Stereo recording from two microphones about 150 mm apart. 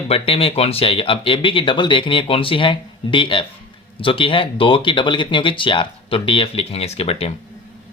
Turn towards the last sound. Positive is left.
turn(degrees=40)  # may be behind; listen again after turning